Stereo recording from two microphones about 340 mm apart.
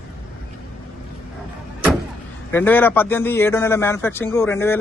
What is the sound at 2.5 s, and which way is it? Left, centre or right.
A man's voice, centre.